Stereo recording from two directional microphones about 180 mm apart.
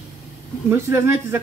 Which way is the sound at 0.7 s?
15° right (ahead or behind).